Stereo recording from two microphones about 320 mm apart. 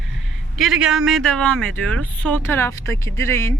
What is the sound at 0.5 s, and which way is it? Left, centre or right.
A woman's voice, centre.